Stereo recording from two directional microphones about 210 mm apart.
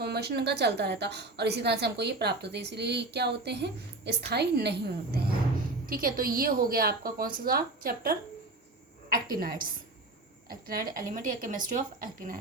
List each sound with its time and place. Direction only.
0.0 s a woman's voice: 50° right (ahead or behind)